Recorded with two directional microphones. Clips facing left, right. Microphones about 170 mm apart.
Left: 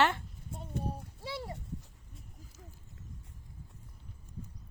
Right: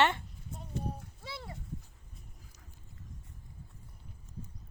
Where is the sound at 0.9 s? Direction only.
35° left (ahead or behind).